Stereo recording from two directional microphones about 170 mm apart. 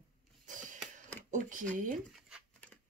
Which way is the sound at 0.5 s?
50° right (ahead or behind).